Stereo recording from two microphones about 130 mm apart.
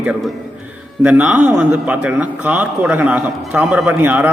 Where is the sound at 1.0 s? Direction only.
10° right (ahead or behind).